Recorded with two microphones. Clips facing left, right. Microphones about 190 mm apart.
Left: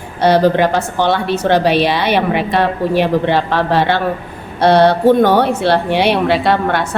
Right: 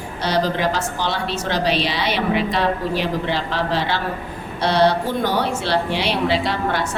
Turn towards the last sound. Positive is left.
turn(degrees=60)  # may be behind; listen again after turning